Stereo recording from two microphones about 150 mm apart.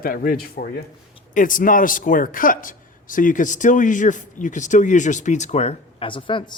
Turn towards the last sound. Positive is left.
turn(degrees=35)  # may be behind; listen again after turning